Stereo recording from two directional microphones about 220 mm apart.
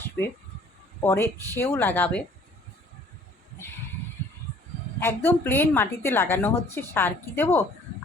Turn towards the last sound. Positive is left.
turn(degrees=10)  # may be behind; listen again after turning